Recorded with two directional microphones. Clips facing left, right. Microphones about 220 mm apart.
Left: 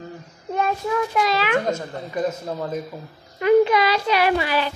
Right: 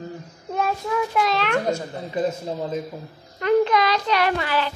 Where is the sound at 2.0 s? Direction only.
25° right (ahead or behind).